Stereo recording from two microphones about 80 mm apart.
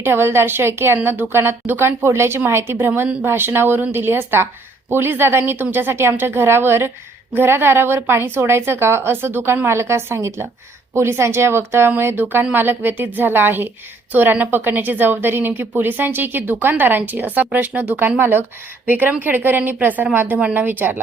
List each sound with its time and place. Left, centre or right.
0.0 s a woman's voice: right